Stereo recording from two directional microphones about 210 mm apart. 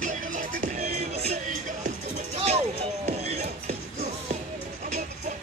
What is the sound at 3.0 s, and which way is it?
Music, 30° right (ahead or behind).